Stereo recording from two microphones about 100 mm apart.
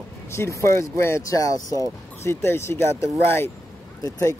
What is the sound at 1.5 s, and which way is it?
Speech, 35° right (ahead or behind).